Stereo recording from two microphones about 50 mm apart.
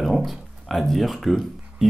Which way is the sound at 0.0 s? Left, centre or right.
Centre.